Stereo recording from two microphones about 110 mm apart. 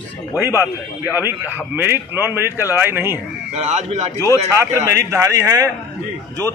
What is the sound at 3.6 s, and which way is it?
Speech, 90° right.